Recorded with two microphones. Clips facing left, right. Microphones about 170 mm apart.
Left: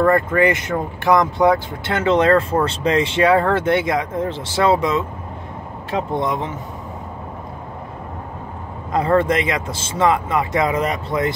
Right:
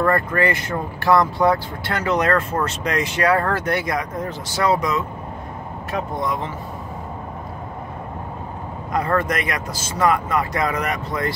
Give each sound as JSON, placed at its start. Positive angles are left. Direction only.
{"t": 0.0, "sound": "speech", "side_deg": 20}
{"t": 8.9, "sound": "speech", "side_deg": 25}